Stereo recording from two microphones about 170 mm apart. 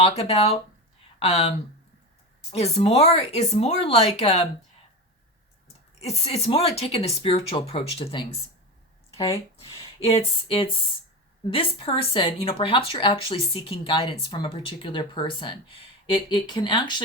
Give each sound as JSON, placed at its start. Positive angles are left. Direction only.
{"t": 0.2, "sound": "speech", "side_deg": 35}
{"t": 6.0, "sound": "speech", "side_deg": 35}
{"t": 10.0, "sound": "speech", "side_deg": 35}